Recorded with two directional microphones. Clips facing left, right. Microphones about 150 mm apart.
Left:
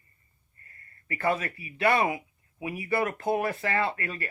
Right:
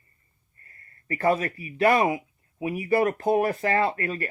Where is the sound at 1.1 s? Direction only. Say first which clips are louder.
Right 5 dB; 40° right (ahead or behind).